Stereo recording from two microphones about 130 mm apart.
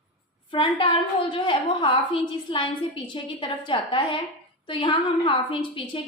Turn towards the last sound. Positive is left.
turn(degrees=40)  # may be behind; listen again after turning